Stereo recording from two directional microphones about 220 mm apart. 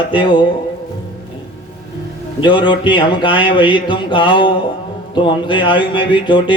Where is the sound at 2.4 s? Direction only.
20° left (ahead or behind).